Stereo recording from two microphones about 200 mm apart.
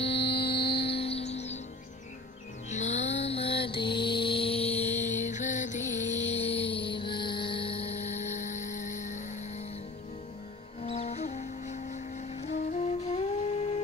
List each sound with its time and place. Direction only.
0.1 s music: 55° left (ahead or behind)
0.7 s music: 30° left (ahead or behind)
2.7 s mantra: 35° left (ahead or behind)
10.8 s music: 30° left (ahead or behind)